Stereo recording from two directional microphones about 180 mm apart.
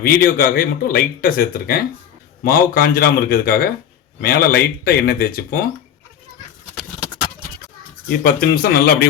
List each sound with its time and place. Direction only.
0.2 s speech: 55° left (ahead or behind)
8.2 s speech: 60° left (ahead or behind)